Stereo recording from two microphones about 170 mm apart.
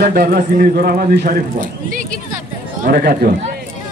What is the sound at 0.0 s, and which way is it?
A man's voice, 65° right (ahead or behind).